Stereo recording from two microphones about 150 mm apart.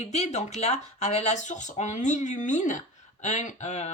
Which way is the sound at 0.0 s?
45° left (ahead or behind).